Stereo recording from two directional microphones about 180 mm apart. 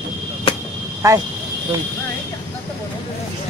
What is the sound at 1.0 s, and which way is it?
Speech, 20° right (ahead or behind).